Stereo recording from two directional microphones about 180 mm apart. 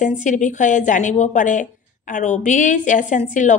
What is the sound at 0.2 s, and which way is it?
A woman's voice, 45° left (ahead or behind).